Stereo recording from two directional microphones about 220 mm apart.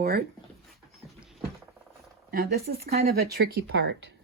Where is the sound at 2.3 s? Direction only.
45° right (ahead or behind).